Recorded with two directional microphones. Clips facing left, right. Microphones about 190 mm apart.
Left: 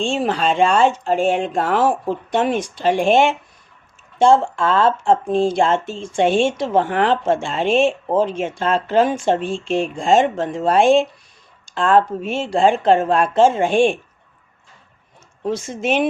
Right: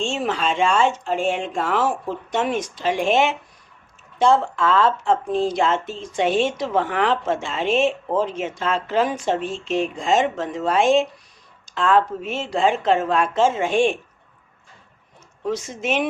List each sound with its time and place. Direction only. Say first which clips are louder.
0.0 s speech: left 4 dB; 35° left (ahead or behind)
11.6 s a sound: left 3 dB; 35° left (ahead or behind)
11.9 s speech: left 4 dB; 30° left (ahead or behind)
15.7 s speech: left 6 dB; 30° left (ahead or behind)